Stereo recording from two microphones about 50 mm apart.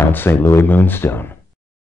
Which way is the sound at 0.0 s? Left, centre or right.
Left.